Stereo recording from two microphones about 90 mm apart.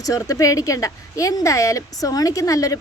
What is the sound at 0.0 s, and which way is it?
A woman's voice, 40° left (ahead or behind).